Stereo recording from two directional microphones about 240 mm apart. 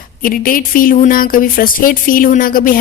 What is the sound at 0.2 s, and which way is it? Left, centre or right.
Speech, left.